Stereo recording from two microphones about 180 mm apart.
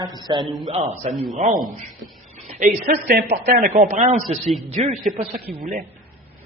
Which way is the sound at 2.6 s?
55° right (ahead or behind).